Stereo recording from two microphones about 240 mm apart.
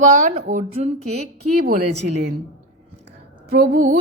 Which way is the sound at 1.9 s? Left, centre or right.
Right.